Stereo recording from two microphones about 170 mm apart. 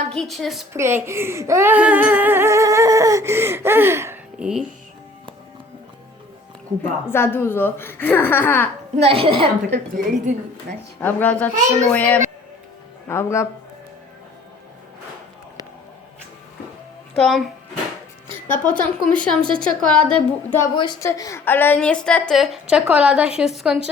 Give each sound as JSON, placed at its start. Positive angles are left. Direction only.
{"t": 0.1, "sound": "a woman's voice", "side_deg": 0}
{"t": 0.7, "sound": "speech", "side_deg": -15}
{"t": 7.1, "sound": "speech", "side_deg": 15}
{"t": 9.0, "sound": "a woman's voice", "side_deg": -35}
{"t": 11.0, "sound": "speech", "side_deg": 10}
{"t": 17.2, "sound": "a woman's voice", "side_deg": 0}
{"t": 20.7, "sound": "a woman's voice", "side_deg": 25}